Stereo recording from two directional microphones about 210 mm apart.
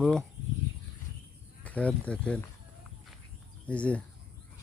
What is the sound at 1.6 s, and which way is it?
Speech, 5° left (ahead or behind).